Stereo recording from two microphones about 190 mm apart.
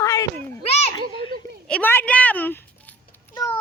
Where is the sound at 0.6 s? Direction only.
35° left (ahead or behind).